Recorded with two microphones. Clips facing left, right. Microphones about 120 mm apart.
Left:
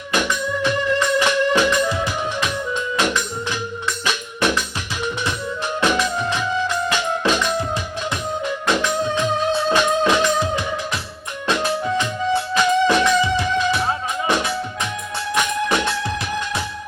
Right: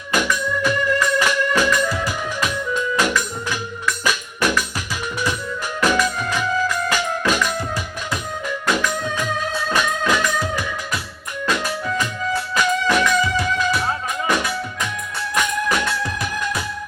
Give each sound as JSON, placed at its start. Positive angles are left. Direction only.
{"t": 0.1, "sound": "music", "side_deg": 25}
{"t": 5.8, "sound": "music", "side_deg": 25}
{"t": 8.6, "sound": "music", "side_deg": 25}